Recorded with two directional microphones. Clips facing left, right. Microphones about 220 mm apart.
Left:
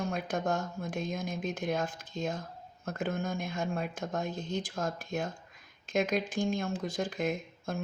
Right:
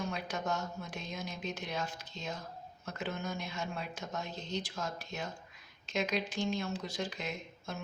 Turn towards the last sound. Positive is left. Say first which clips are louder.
# left 6 dB
turn(degrees=50)  # may be behind; listen again after turning